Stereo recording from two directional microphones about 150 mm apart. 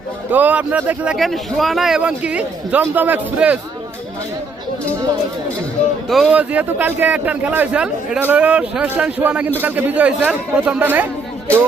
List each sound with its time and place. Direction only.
0.3 s a man's voice: 10° right (ahead or behind)
6.1 s a man's voice: centre (ahead or behind)